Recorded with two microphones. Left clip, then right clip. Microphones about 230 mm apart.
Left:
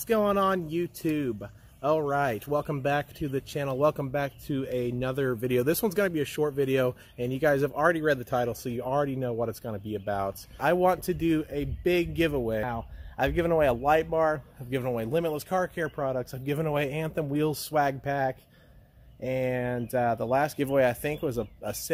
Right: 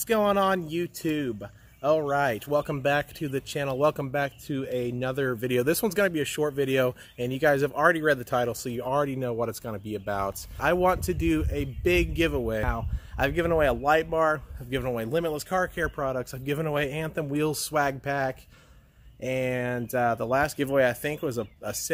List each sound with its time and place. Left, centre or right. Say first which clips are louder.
0.0 s speech: right 1 dB; centre